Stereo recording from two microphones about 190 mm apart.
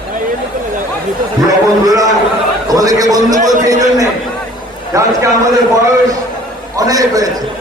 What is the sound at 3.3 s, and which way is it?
Speech, 40° right (ahead or behind).